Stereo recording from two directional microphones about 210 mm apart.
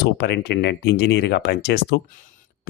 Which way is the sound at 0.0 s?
50° left (ahead or behind).